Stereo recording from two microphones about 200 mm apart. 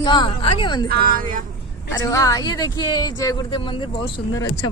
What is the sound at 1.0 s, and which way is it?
Speech, 45° right (ahead or behind).